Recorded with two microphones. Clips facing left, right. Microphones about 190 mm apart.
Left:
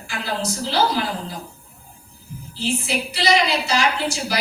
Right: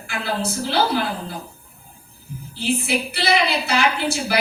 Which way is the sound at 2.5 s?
60° right (ahead or behind).